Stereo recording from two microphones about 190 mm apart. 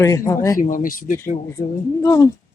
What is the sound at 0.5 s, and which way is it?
Speech, 45° left (ahead or behind).